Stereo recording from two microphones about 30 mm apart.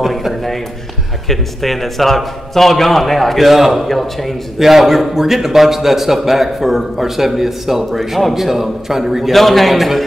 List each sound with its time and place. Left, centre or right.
0.0 s a sound: centre
1.3 s a man's voice: centre
3.3 s a man's voice: centre
4.6 s a man's voice: centre
9.3 s a man's voice: centre